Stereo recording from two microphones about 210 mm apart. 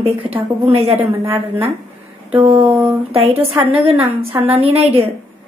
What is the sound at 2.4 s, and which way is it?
Speech, 30° right (ahead or behind).